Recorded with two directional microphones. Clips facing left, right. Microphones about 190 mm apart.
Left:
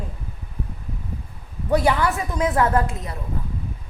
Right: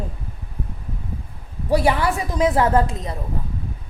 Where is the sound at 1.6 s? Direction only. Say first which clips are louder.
Right 1 dB; 25° right (ahead or behind).